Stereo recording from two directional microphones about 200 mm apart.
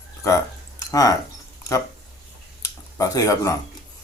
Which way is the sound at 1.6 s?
15° left (ahead or behind).